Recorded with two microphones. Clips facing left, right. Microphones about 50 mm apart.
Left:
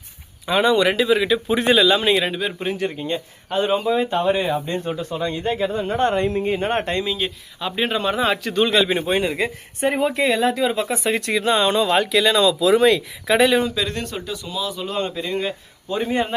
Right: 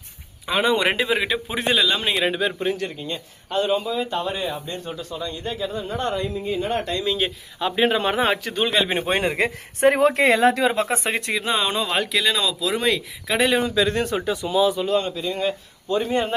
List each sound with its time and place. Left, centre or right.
0.4 s speech: centre
0.8 s speech: right
1.5 s speech: centre
2.6 s speech: centre; by 6.1 s left
6.1 s speech: left
7.0 s speech: centre
8.8 s speech: right
9.0 s a man's voice: right
9.8 s speech: right
11.3 s speech: centre
14.2 s speech: right
15.0 s speech: left
15.4 s speech: centre